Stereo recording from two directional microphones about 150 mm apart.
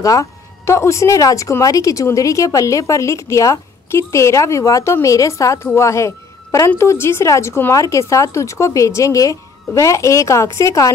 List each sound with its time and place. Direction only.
0.0 s speech: 20° left (ahead or behind)